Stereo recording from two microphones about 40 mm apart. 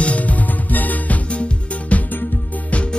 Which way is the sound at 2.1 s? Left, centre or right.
Left.